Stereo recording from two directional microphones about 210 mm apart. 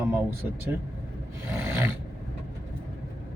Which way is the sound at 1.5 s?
10° right (ahead or behind).